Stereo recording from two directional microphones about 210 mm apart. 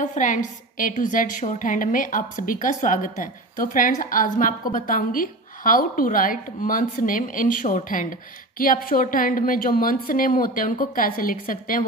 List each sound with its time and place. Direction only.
0.0 s a woman's voice: 40° left (ahead or behind)